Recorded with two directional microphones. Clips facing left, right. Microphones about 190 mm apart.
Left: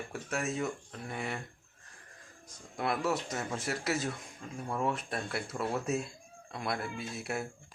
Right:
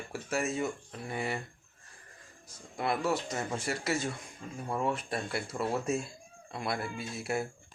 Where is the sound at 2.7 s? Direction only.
Centre (ahead or behind).